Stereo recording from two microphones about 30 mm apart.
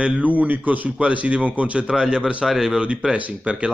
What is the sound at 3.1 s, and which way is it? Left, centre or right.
Speech, right.